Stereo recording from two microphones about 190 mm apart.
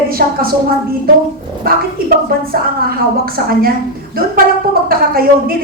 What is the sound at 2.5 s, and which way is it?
A woman's voice, 50° right (ahead or behind).